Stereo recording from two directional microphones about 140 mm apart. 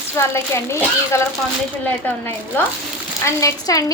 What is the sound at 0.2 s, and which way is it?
A woman's voice, 20° left (ahead or behind).